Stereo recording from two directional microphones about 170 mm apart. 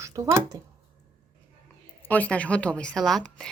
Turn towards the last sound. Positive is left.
turn(degrees=5)  # may be behind; listen again after turning